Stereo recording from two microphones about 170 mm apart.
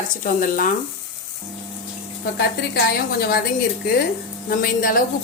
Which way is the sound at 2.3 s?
65° left (ahead or behind).